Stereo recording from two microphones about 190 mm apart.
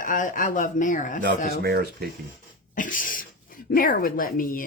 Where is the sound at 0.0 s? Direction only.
45° left (ahead or behind).